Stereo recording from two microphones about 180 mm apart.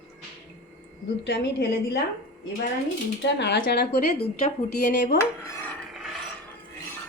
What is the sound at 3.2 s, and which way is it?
Speech, 75° left (ahead or behind).